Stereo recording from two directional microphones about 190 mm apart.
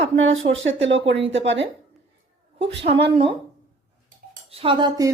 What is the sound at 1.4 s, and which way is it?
Speech, 75° right (ahead or behind).